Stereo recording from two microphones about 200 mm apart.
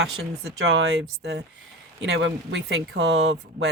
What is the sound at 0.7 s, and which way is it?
Speech, 80° right.